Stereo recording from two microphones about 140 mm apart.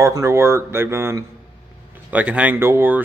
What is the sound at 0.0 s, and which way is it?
Speech, 20° right (ahead or behind).